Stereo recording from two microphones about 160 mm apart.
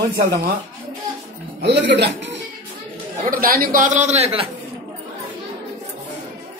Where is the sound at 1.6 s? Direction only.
90° right.